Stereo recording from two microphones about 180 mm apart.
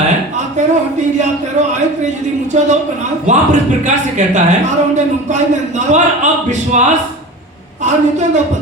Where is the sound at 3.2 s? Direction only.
40° right (ahead or behind).